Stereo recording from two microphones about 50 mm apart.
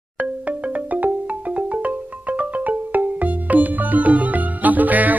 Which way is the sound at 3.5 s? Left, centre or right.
Right.